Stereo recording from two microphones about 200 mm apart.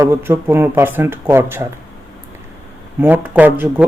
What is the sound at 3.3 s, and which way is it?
Speech, 10° right (ahead or behind).